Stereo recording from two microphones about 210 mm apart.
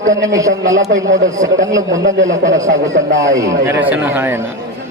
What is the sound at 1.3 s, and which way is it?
Speech, 15° right (ahead or behind).